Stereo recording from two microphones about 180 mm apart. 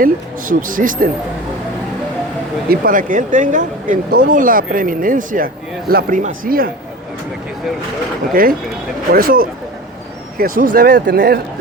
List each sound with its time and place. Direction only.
0.0 s speech: 50° right (ahead or behind)
2.6 s speech: 50° right (ahead or behind)
8.3 s speech: 55° right (ahead or behind)